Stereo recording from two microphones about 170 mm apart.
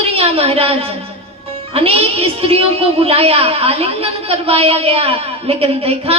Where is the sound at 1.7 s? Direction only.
35° right (ahead or behind).